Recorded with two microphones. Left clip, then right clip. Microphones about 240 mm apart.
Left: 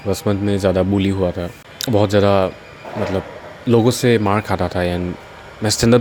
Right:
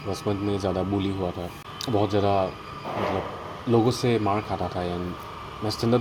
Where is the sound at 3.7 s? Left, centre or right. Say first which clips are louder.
Left 8 dB; left.